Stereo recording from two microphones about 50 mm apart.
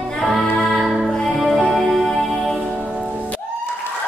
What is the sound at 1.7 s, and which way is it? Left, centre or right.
Music, centre.